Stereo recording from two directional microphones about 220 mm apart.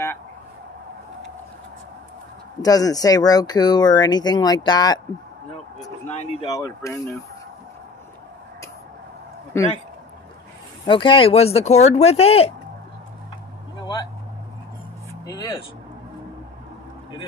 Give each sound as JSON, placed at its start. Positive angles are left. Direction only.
{"t": 2.6, "sound": "speech", "side_deg": 15}
{"t": 6.0, "sound": "speech", "side_deg": 30}
{"t": 6.5, "sound": "speech", "side_deg": 15}
{"t": 10.9, "sound": "speech", "side_deg": 20}
{"t": 13.7, "sound": "vehicle", "side_deg": 20}
{"t": 15.2, "sound": "speech", "side_deg": 15}